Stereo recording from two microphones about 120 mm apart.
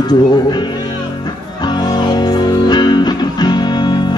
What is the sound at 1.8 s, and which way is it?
Music, 35° left (ahead or behind).